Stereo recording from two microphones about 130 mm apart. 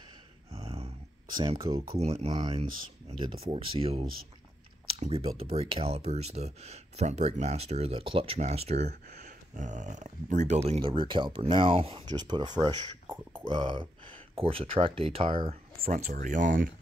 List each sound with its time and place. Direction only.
0.5 s a sound: 50° right (ahead or behind)
1.7 s speech: 40° right (ahead or behind)
2.0 s speech: 55° right (ahead or behind)
2.2 s speech: 35° right (ahead or behind)
3.5 s speech: 50° right (ahead or behind)
5.0 s speech: 50° right (ahead or behind)
12.1 s speech: 35° right (ahead or behind)
15.9 s speech: 80° right